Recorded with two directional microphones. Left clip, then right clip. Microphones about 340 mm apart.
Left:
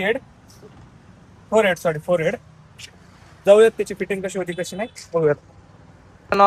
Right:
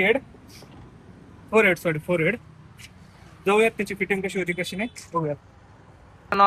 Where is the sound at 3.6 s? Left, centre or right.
Centre.